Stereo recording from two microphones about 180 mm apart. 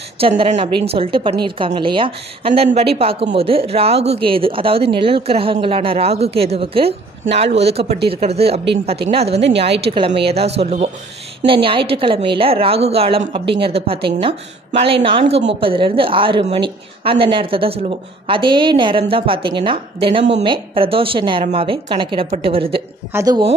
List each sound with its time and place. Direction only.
0.2 s a woman's voice: 35° right (ahead or behind)
23.1 s a woman's voice: 20° right (ahead or behind)